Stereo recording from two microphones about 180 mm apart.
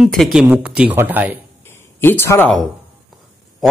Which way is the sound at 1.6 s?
10° left (ahead or behind).